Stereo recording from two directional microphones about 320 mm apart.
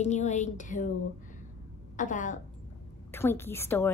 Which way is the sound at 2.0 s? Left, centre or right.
Left.